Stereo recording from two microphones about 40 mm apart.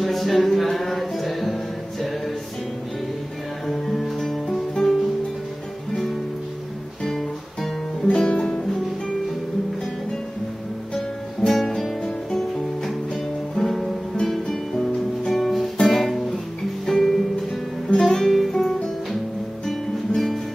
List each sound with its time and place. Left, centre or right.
0.0 s music: centre
3.6 s music: centre
7.1 s guitar: centre
8.2 s music: centre
11.4 s music: centre
17.8 s music: centre
18.1 s music: centre